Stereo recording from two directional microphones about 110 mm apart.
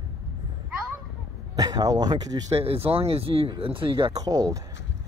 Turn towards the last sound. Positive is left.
turn(degrees=-35)  # may be behind; listen again after turning